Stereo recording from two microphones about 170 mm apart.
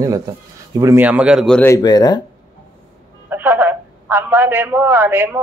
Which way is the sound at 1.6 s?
20° left (ahead or behind).